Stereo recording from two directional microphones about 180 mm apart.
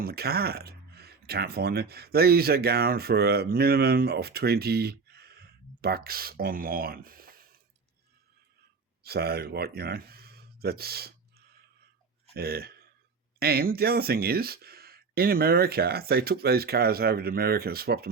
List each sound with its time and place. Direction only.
0.0 s speech: 60° right (ahead or behind)
9.0 s speech: 60° right (ahead or behind)